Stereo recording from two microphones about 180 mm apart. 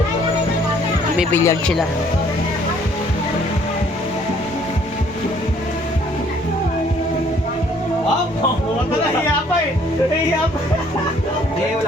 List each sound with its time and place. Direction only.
1.3 s speech: 15° left (ahead or behind)